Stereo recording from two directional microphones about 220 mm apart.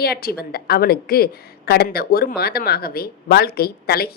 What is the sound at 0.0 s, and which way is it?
A woman's voice, 45° left (ahead or behind).